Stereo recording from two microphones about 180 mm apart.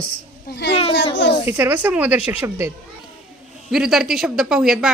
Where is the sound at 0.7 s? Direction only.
30° left (ahead or behind).